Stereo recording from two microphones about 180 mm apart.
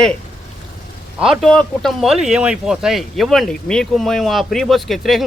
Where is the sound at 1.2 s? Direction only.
Centre (ahead or behind).